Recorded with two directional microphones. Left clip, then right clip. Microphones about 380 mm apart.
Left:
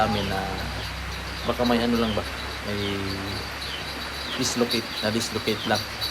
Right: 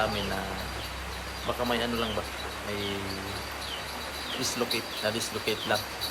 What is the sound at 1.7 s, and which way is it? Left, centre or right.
Speech, centre.